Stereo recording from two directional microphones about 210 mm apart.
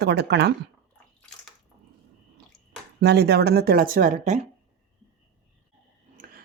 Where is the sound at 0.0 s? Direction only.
50° right (ahead or behind).